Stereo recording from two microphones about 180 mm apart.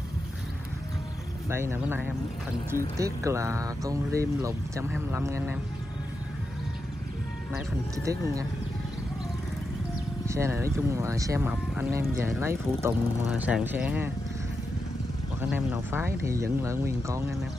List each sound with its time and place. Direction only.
1.5 s speech: 15° right (ahead or behind)
8.0 s speech: 15° right (ahead or behind)
10.2 s speech: 15° right (ahead or behind)
15.4 s speech: 10° right (ahead or behind)